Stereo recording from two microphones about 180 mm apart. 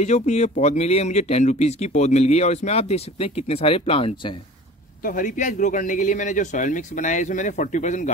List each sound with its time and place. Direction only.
0.0 s speech: 40° left (ahead or behind)
5.0 s speech: 45° left (ahead or behind)